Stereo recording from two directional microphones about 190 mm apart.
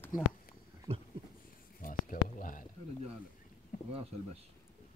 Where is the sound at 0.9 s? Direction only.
25° right (ahead or behind).